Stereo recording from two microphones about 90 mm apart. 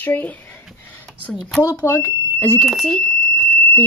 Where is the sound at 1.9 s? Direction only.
25° left (ahead or behind).